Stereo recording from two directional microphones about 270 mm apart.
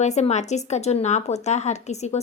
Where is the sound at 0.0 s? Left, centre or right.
Left.